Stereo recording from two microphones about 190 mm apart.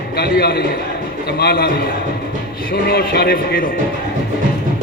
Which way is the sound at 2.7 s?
55° left (ahead or behind).